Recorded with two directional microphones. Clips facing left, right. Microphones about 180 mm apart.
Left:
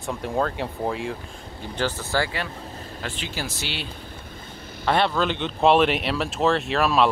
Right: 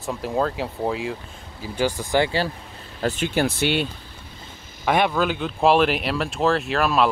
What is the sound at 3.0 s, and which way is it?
Speech, 50° right (ahead or behind).